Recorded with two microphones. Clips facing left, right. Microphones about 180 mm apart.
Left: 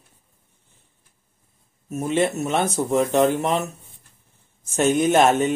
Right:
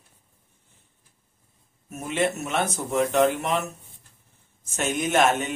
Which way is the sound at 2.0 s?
35° left (ahead or behind).